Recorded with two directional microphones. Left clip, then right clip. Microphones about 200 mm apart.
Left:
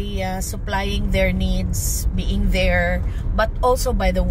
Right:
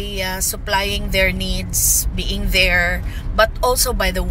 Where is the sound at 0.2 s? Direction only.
10° left (ahead or behind).